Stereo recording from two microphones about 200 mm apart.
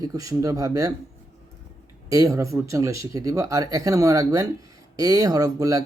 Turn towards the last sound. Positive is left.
turn(degrees=-15)  # may be behind; listen again after turning